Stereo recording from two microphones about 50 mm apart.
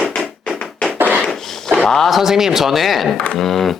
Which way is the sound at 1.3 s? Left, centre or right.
Centre.